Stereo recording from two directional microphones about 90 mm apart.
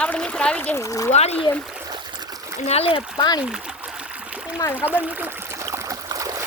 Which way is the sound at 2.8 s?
85° left.